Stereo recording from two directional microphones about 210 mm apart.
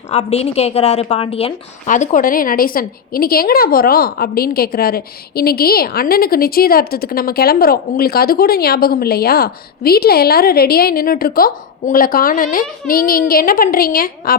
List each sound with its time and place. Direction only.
0.1 s a woman's voice: 30° left (ahead or behind)